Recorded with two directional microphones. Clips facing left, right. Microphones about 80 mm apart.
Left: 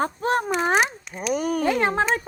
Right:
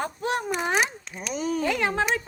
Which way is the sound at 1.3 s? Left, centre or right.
Left.